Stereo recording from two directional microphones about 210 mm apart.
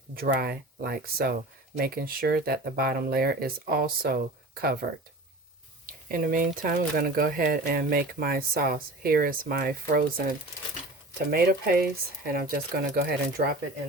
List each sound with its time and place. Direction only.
0.2 s speech: 45° right (ahead or behind)